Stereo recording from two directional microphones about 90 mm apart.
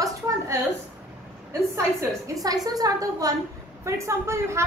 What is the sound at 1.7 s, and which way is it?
Speech, 35° right (ahead or behind).